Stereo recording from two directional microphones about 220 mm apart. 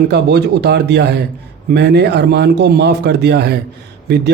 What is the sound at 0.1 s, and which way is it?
A man's voice, 50° right (ahead or behind).